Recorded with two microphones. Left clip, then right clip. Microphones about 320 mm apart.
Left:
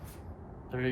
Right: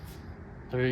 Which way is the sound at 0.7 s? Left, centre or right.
Right.